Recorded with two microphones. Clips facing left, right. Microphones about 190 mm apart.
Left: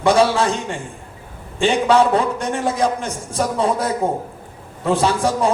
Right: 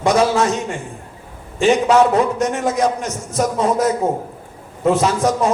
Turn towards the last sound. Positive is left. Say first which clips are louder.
# right 1 dB
turn(degrees=30)  # may be behind; listen again after turning